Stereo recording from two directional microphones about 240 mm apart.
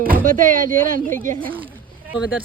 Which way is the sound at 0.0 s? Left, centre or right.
Right.